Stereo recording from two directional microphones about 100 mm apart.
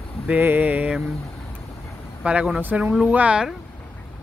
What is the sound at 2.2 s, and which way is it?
Speech, 10° right (ahead or behind).